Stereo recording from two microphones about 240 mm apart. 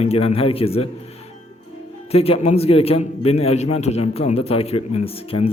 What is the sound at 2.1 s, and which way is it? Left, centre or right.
A man's voice, left.